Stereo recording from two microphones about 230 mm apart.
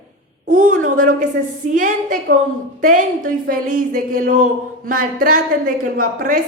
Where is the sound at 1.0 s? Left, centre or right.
Right.